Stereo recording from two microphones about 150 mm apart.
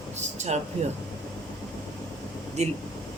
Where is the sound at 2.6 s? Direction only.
50° right (ahead or behind).